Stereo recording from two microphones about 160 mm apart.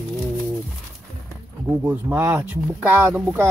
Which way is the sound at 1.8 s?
10° right (ahead or behind).